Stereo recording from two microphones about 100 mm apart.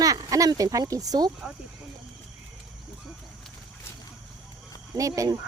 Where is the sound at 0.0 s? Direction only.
35° right (ahead or behind).